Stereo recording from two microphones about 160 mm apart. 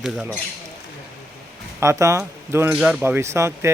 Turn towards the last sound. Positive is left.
turn(degrees=-15)  # may be behind; listen again after turning